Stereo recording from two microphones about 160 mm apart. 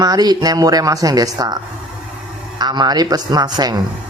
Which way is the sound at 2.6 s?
25° right (ahead or behind).